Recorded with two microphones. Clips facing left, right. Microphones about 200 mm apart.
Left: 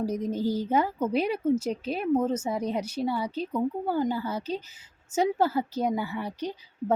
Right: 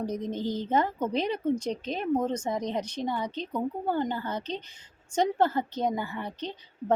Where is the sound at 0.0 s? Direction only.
10° left (ahead or behind).